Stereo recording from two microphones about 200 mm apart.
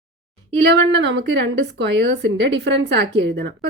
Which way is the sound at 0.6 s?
60° right (ahead or behind).